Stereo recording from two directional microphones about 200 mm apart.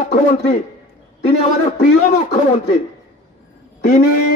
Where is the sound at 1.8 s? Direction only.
40° left (ahead or behind).